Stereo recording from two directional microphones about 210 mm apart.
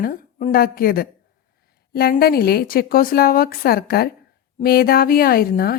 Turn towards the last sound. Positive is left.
turn(degrees=45)  # may be behind; listen again after turning